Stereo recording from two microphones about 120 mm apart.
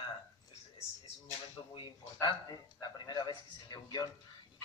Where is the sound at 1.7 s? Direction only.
40° left (ahead or behind).